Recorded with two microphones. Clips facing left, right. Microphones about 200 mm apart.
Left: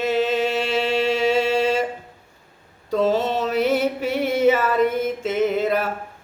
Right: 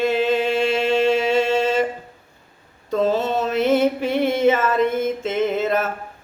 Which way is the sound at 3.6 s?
5° left (ahead or behind).